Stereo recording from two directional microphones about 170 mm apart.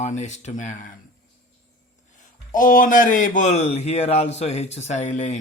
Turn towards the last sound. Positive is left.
turn(degrees=40)  # may be behind; listen again after turning